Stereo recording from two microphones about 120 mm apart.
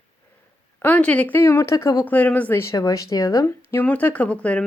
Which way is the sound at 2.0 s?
15° left (ahead or behind).